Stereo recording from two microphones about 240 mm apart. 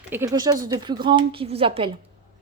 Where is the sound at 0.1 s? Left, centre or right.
Centre.